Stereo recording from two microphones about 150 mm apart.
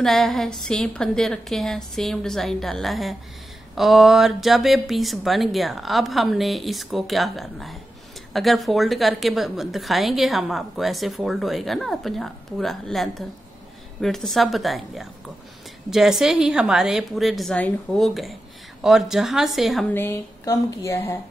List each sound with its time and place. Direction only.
0.0 s a woman's voice: centre (ahead or behind)
19.9 s speech: 15° left (ahead or behind)